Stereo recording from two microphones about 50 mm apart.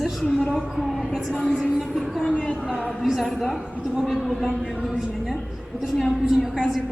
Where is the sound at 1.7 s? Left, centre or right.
Centre.